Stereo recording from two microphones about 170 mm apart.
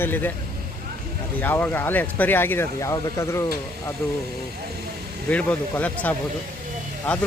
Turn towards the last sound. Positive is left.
turn(degrees=5)  # may be behind; listen again after turning